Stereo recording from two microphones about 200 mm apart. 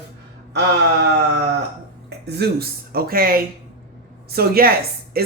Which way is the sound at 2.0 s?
55° right (ahead or behind).